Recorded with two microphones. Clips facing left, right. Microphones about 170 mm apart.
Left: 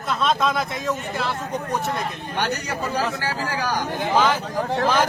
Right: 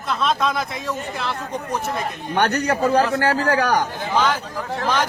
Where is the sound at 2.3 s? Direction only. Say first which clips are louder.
Right 8 dB; 60° right (ahead or behind).